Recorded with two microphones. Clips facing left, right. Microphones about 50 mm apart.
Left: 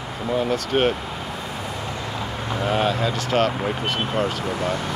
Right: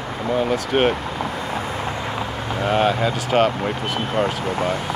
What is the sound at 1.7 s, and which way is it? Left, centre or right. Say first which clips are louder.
Vehicle: right 4 dB; right.